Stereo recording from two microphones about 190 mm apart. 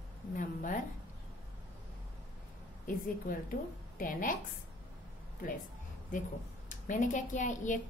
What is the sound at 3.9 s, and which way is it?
Speech, 45° left (ahead or behind).